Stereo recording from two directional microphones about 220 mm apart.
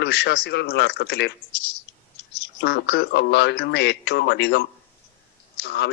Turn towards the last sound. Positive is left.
turn(degrees=50)  # may be behind; listen again after turning